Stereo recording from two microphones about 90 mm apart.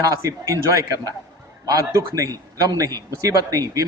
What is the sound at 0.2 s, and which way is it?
Speech, 35° right (ahead or behind).